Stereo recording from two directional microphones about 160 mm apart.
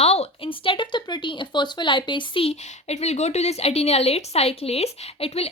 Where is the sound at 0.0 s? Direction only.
40° left (ahead or behind).